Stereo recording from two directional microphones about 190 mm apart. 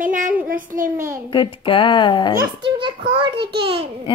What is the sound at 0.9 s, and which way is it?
Speech, 15° right (ahead or behind).